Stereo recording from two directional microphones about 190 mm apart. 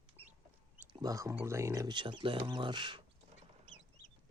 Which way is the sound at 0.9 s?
20° right (ahead or behind).